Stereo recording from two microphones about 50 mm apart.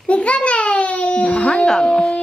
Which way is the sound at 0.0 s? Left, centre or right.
Left.